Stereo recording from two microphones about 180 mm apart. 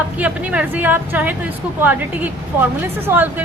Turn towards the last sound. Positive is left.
turn(degrees=-10)  # may be behind; listen again after turning